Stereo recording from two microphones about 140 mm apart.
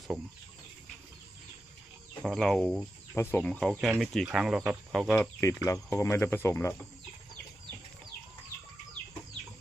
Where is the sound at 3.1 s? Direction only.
15° left (ahead or behind).